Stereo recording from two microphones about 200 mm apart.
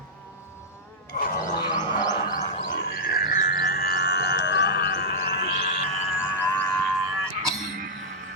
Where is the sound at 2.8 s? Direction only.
50° left (ahead or behind).